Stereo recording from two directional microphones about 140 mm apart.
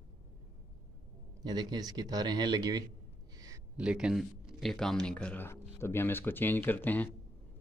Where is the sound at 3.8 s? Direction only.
5° right (ahead or behind); by 7.1 s 10° left (ahead or behind).